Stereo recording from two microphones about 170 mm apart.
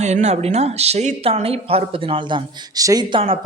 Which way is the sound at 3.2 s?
35° right (ahead or behind).